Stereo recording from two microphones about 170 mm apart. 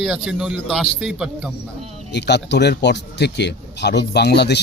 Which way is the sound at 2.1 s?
90° left.